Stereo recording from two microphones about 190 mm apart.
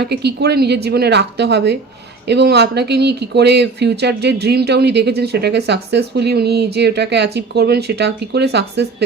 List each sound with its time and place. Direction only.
0.0 s speech: 60° right (ahead or behind)